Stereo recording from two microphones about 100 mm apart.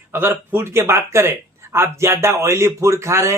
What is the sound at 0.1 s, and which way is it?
Speech, 25° right (ahead or behind).